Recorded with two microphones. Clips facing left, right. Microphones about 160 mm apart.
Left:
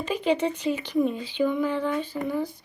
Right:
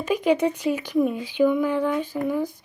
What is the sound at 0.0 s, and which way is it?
Speech, 10° right (ahead or behind).